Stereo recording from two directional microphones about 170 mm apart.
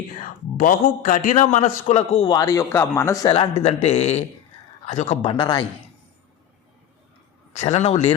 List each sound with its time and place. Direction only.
0.2 s a man's voice: 50° left (ahead or behind); by 3.2 s 15° left (ahead or behind)
3.2 s a man's voice: 30° left (ahead or behind)
5.3 s speech: 25° left (ahead or behind)
7.5 s a man's voice: 40° left (ahead or behind)